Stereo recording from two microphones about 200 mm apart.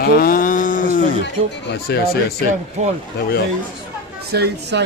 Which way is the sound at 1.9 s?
55° left (ahead or behind).